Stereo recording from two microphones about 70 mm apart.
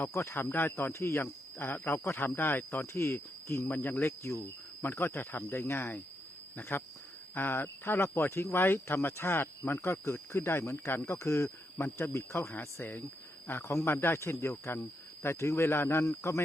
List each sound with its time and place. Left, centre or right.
0.1 s speech: left
3.7 s speech: left
4.2 s speech: left
4.8 s speech: left
11.8 s speech: left